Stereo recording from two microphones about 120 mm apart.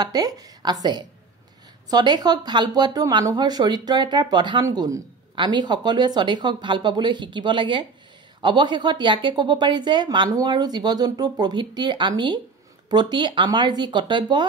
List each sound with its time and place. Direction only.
0.0 s speech: 30° right (ahead or behind)
5.3 s speech: 40° right (ahead or behind)